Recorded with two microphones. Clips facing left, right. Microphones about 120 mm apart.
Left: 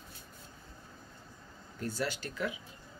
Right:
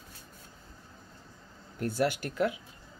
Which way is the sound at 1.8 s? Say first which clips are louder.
Right 7 dB; 60° right (ahead or behind).